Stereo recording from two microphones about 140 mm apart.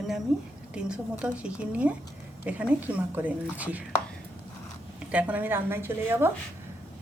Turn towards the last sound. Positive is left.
turn(degrees=-15)  # may be behind; listen again after turning